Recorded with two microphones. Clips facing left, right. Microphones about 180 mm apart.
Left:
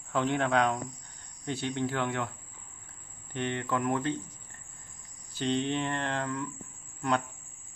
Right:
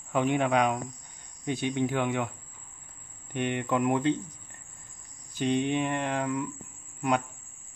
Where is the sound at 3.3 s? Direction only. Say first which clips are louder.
Right 3 dB; 15° right (ahead or behind).